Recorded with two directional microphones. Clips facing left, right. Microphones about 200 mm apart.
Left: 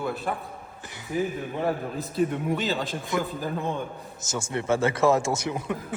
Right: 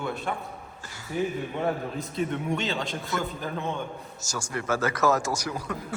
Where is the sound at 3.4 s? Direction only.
15° left (ahead or behind).